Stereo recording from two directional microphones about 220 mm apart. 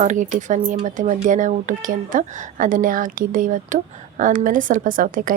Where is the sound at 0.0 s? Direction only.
35° right (ahead or behind).